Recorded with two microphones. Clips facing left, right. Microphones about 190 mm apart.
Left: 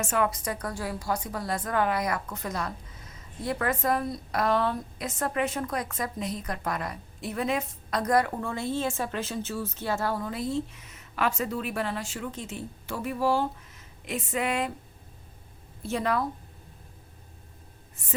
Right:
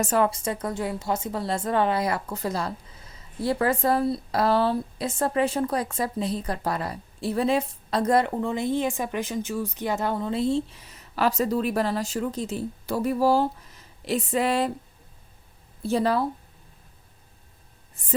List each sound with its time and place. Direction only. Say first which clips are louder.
0.0 s a woman's voice: right 4 dB; 35° right (ahead or behind)
15.8 s a woman's voice: right 5 dB; 35° right (ahead or behind)